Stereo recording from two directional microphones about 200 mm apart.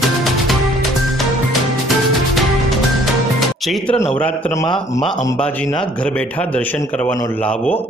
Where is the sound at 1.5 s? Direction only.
Centre (ahead or behind).